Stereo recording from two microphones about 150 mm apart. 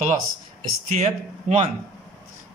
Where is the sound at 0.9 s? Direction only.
50° right (ahead or behind).